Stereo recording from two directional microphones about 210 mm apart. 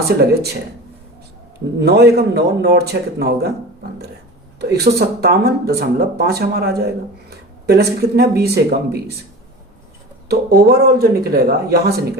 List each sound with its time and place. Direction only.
1.8 s speech: 50° right (ahead or behind)
4.7 s speech: 50° right (ahead or behind)
10.2 s speech: 50° right (ahead or behind)